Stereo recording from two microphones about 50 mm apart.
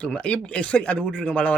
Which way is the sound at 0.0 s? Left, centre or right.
Left.